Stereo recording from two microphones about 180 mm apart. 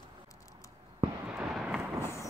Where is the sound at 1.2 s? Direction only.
5° right (ahead or behind).